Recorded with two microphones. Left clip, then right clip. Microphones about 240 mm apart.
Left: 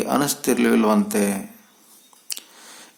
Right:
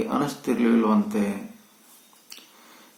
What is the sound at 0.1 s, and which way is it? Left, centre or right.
Speech, left.